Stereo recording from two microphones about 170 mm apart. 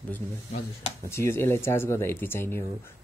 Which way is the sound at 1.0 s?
15° left (ahead or behind).